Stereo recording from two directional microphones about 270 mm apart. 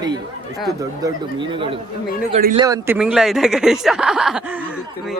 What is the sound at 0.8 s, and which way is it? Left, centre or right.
A man's voice, centre.